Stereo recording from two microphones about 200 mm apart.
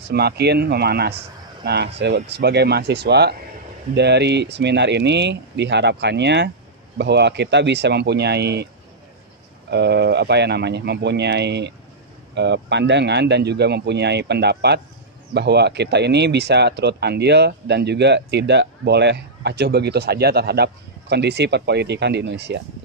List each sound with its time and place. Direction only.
0.1 s speech: 55° right (ahead or behind)
9.7 s speech: 55° right (ahead or behind)